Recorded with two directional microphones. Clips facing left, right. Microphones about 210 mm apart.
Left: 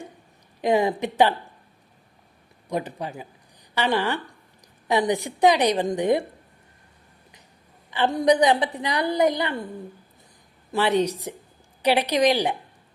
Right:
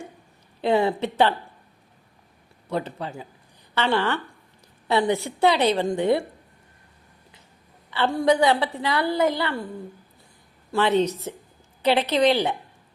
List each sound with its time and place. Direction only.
0.6 s a woman's voice: 15° left (ahead or behind)
2.6 s a woman's voice: 15° left (ahead or behind)
7.9 s a woman's voice: 15° left (ahead or behind)
10.7 s a woman's voice: 15° left (ahead or behind)